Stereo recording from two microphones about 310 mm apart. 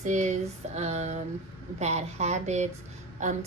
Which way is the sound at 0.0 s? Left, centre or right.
Right.